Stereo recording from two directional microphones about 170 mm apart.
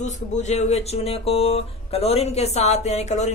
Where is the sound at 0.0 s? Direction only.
40° left (ahead or behind).